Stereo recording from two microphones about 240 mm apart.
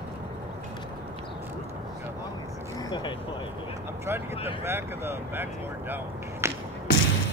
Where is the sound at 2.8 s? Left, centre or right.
Centre.